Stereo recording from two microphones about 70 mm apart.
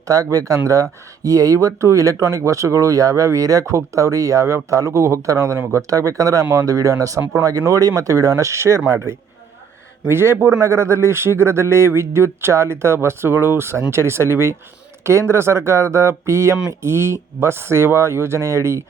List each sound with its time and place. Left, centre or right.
0.1 s speech: right
10.1 s speech: right